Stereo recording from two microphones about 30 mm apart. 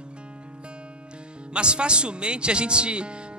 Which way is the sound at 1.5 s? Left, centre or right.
Right.